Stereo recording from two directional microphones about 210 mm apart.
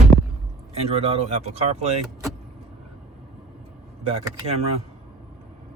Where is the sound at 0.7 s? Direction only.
30° right (ahead or behind).